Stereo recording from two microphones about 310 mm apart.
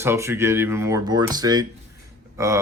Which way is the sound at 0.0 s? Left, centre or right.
Centre.